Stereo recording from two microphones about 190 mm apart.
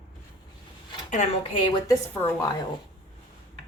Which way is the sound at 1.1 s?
30° left (ahead or behind).